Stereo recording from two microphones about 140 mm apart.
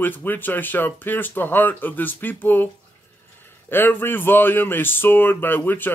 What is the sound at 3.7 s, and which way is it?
Speech, 15° left (ahead or behind).